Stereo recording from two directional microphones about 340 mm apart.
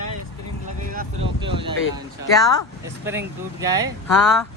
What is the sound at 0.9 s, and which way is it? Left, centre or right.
Vehicle, centre.